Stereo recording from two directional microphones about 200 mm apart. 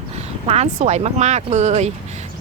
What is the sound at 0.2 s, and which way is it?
Speech, 30° right (ahead or behind).